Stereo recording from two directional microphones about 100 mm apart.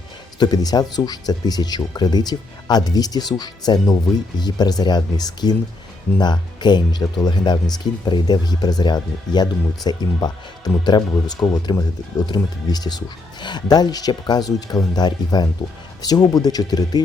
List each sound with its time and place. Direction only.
0.3 s speech: 40° left (ahead or behind)